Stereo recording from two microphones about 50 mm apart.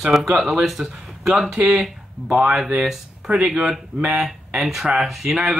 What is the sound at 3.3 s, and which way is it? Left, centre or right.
Speech, right.